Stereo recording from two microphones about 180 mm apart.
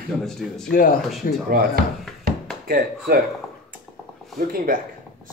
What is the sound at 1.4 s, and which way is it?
Speech, 55° right (ahead or behind).